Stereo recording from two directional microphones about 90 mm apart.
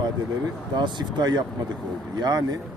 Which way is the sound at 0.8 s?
55° right (ahead or behind).